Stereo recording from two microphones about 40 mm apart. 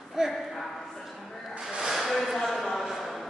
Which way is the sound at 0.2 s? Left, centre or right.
Centre.